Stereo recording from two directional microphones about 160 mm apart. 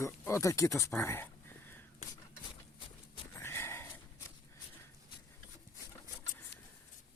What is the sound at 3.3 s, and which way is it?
Wheeze, 15° left (ahead or behind).